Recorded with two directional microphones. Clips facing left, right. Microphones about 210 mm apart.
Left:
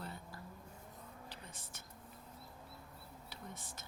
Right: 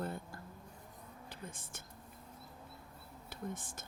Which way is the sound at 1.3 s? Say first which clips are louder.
Right 4 dB; 50° right (ahead or behind).